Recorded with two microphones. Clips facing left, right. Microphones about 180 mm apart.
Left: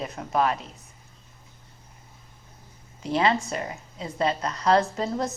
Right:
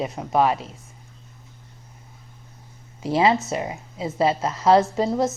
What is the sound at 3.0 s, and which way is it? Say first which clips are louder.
A woman's voice: right 4 dB; 25° right (ahead or behind).